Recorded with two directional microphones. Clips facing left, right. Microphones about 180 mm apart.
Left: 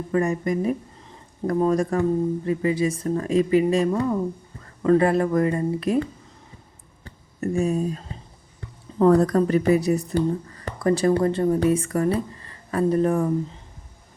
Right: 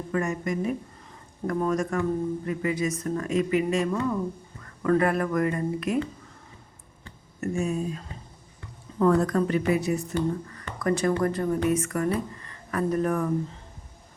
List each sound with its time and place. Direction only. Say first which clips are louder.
0.1 s speech: left 5 dB; 30° left (ahead or behind)
7.0 s a sound: left 4 dB; 35° left (ahead or behind)
9.0 s speech: left 5 dB; 35° left (ahead or behind)